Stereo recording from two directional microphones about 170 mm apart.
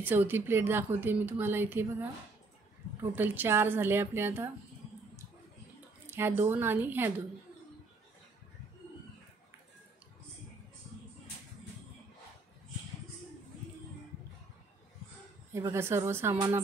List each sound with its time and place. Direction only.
0.0 s a woman's voice: 10° right (ahead or behind)
6.0 s a woman's voice: 15° right (ahead or behind)
15.5 s a woman's voice: 15° right (ahead or behind)